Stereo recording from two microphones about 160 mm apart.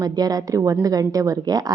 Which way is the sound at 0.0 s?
25° right (ahead or behind).